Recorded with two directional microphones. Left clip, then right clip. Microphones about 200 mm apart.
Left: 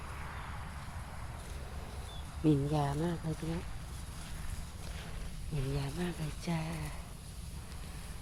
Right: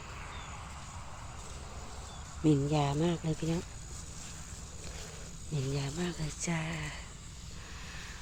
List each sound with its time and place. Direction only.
2.4 s speech: 15° right (ahead or behind)
5.5 s speech: 15° right (ahead or behind)